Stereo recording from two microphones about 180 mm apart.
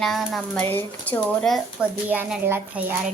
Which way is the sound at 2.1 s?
10° right (ahead or behind).